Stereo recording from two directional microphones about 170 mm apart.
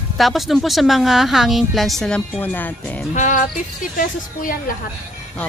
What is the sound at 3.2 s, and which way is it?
A woman's voice, 50° left (ahead or behind).